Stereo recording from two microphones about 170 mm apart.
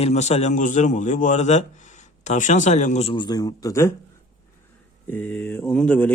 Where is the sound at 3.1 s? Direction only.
25° left (ahead or behind).